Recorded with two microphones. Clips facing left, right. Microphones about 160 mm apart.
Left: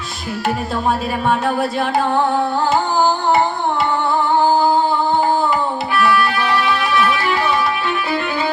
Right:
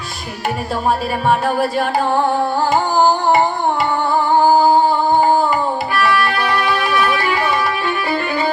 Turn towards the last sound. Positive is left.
turn(degrees=-10)  # may be behind; listen again after turning